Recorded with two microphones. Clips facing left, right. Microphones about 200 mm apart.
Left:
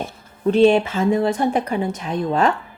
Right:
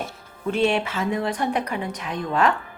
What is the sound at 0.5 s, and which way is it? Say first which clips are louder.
Speech: left 8 dB; 35° left (ahead or behind).